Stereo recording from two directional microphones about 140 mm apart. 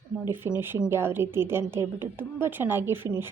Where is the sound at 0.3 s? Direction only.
15° right (ahead or behind).